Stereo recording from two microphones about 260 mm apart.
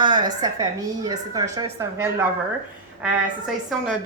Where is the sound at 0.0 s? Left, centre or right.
Centre.